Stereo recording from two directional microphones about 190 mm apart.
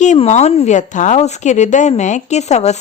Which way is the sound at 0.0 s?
40° left (ahead or behind).